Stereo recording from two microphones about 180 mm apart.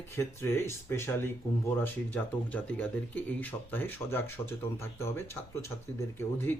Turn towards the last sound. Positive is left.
turn(degrees=15)  # may be behind; listen again after turning